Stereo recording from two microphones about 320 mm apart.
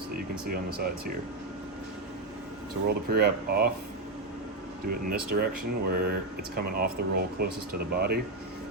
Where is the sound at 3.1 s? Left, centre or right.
Right.